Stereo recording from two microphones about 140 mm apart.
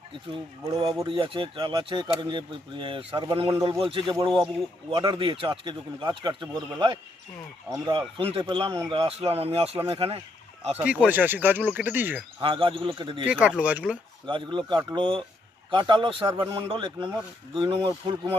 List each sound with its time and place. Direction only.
0.7 s speech: 40° right (ahead or behind)
3.5 s a man's voice: 25° right (ahead or behind)
4.3 s speech: centre (ahead or behind)
4.9 s speech: 40° right (ahead or behind)
10.8 s speech: 10° right (ahead or behind)
12.4 s speech: 35° right (ahead or behind)
13.2 s speech: 10° right (ahead or behind)
14.3 s speech: 35° right (ahead or behind)